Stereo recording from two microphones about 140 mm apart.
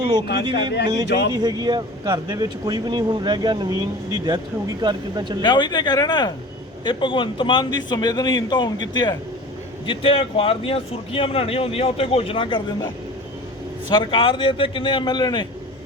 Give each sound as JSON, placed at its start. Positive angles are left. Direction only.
{"t": 0.1, "sound": "speech", "side_deg": -30}
{"t": 5.4, "sound": "speech", "side_deg": 35}
{"t": 13.9, "sound": "speech", "side_deg": 35}